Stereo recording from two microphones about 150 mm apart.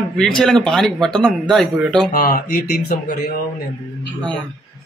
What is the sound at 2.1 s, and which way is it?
Speech, 75° left (ahead or behind).